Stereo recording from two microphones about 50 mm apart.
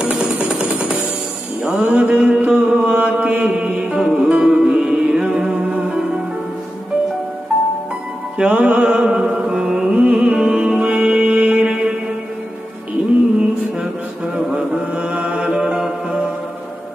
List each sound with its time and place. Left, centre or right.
0.0 s music: centre
1.6 s mantra: centre
4.3 s music: centre
8.4 s mantra: right
9.4 s music: centre
13.4 s mantra: centre